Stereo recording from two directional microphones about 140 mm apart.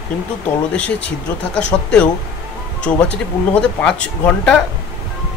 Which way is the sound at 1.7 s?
30° left (ahead or behind).